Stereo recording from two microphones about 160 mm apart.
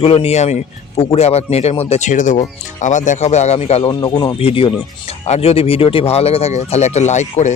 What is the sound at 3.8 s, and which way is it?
Speech, 25° left (ahead or behind).